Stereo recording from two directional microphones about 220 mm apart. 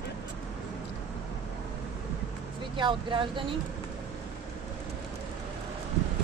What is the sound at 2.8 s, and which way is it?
Speech, 20° right (ahead or behind).